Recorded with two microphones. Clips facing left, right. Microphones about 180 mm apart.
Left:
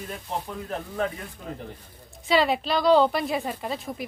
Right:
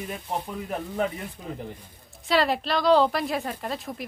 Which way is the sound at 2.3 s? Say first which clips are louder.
Left 1 dB; centre (ahead or behind).